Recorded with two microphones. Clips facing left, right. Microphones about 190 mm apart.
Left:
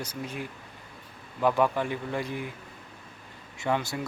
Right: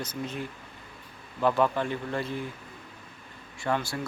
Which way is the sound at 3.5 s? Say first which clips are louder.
Left 1 dB; 20° left (ahead or behind).